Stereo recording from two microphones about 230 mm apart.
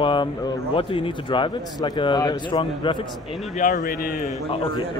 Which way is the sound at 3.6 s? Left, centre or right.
Left.